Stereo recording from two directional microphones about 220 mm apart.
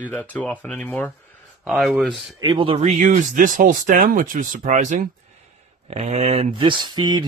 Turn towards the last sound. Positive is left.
turn(degrees=-20)  # may be behind; listen again after turning